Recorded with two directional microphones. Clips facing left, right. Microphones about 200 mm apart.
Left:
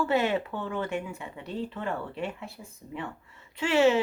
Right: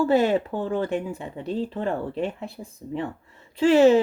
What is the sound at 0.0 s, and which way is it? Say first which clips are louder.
Speech: right 6 dB; 35° right (ahead or behind).